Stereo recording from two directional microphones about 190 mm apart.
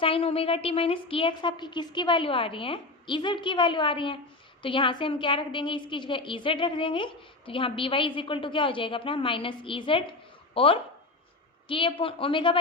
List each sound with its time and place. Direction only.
0.0 s a woman's voice: 30° left (ahead or behind)